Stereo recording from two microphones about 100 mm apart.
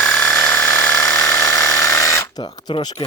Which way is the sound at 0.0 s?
15° left (ahead or behind).